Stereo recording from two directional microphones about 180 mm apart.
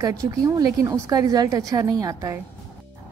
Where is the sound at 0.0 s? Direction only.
20° right (ahead or behind).